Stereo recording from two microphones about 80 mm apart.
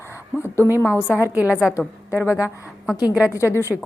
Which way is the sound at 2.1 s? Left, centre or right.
Left.